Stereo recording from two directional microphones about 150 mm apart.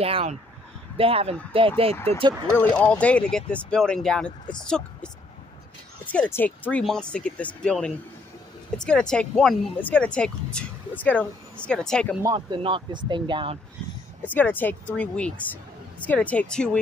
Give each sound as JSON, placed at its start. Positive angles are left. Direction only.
{"t": 0.0, "sound": "speech", "side_deg": -40}
{"t": 2.5, "sound": "a woman's voice", "side_deg": 10}
{"t": 12.4, "sound": "speech", "side_deg": -35}
{"t": 14.2, "sound": "speech", "side_deg": 10}